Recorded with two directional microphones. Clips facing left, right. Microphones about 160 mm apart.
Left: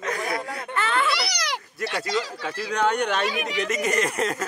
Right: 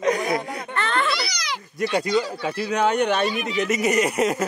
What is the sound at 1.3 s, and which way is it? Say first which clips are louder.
Goat: left 1 dB; 65° left (ahead or behind).